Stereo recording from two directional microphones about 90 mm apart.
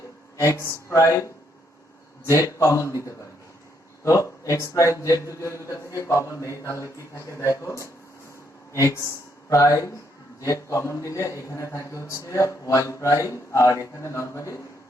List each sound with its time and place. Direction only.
0.3 s a man's voice: 30° left (ahead or behind)